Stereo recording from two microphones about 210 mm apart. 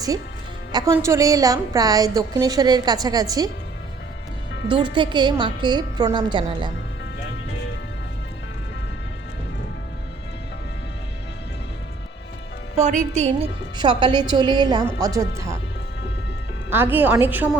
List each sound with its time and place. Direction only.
0.7 s a woman's voice: 20° right (ahead or behind)
4.7 s a woman's voice: 20° right (ahead or behind)
12.8 s a woman's voice: 35° right (ahead or behind); by 15.5 s 15° right (ahead or behind)
16.6 s a woman's voice: 10° right (ahead or behind)